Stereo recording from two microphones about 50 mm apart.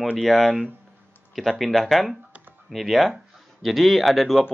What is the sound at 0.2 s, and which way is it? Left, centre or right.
Speech, centre.